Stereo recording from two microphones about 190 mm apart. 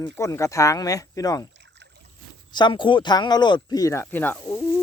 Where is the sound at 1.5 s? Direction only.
65° right (ahead or behind).